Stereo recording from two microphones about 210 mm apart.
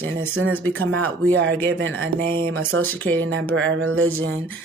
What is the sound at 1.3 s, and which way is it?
Speech, 70° right (ahead or behind).